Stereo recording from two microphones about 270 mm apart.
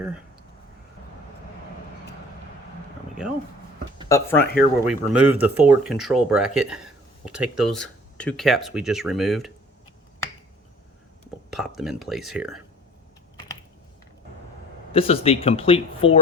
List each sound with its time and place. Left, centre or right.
4.1 s speech: centre
11.5 s speech: centre
14.9 s speech: left